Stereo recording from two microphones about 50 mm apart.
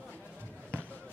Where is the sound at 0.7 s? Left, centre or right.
Left.